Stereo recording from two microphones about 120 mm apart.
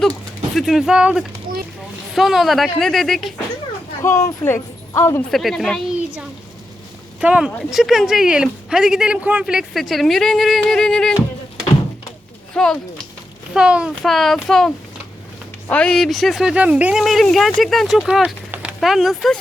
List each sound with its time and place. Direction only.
0.5 s speech: centre (ahead or behind)
4.0 s speech: 25° left (ahead or behind)
5.3 s speech: centre (ahead or behind)
7.2 s speech: 10° right (ahead or behind)
12.5 s speech: 5° left (ahead or behind)
13.5 s speech: 5° right (ahead or behind)